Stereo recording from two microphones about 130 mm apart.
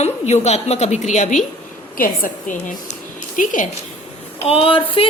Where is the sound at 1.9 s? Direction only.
90° left.